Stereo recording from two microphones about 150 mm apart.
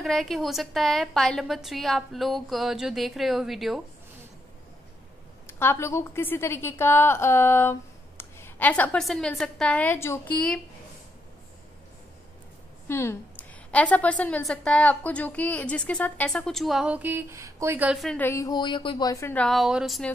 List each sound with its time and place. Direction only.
0.0 s a woman's voice: centre (ahead or behind)
5.5 s a woman's voice: 15° left (ahead or behind)
10.3 s a woman's voice: 5° left (ahead or behind)
12.8 s a woman's voice: 15° left (ahead or behind); by 17.9 s 15° right (ahead or behind)
17.9 s a woman's voice: centre (ahead or behind)
18.2 s speech: 20° left (ahead or behind)
19.3 s a woman's voice: 5° left (ahead or behind)